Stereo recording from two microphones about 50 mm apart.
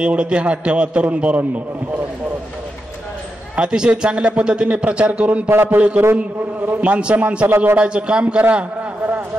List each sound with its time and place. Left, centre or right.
0.0 s a man's voice: right
3.5 s a man's voice: centre
5.5 s speech: right
6.8 s a man's voice: right
7.4 s speech: right
7.8 s a man's voice: right